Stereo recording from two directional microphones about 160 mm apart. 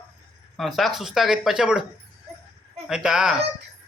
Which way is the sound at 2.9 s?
5° right (ahead or behind).